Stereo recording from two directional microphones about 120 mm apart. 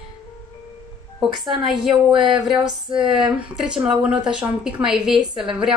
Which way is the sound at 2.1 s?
45° right (ahead or behind).